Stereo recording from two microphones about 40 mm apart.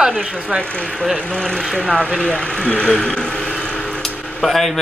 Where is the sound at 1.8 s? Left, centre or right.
Left.